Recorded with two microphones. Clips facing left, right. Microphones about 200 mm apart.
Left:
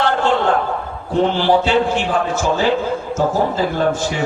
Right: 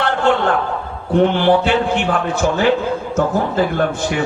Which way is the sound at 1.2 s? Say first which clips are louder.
Right 1 dB; 60° right (ahead or behind).